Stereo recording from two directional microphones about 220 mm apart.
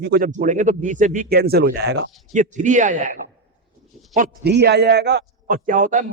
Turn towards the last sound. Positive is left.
turn(degrees=-35)  # may be behind; listen again after turning